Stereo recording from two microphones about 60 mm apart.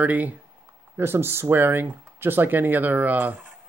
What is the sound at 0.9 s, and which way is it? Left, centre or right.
Speech, right.